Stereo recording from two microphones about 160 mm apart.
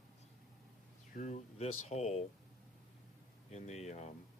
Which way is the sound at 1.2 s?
45° left (ahead or behind).